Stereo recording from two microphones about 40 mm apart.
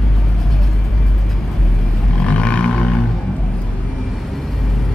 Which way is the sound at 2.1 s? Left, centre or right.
Left.